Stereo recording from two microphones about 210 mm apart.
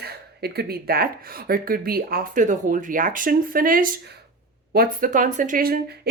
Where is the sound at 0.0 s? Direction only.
50° right (ahead or behind).